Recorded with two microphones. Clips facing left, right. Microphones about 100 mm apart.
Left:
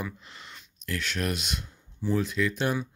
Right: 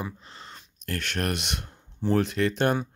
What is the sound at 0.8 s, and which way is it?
Speech, 50° right (ahead or behind).